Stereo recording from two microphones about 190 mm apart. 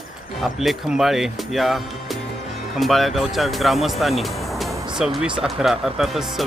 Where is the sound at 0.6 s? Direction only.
Centre (ahead or behind).